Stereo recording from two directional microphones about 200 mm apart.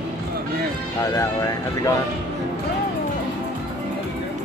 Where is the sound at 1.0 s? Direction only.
15° left (ahead or behind).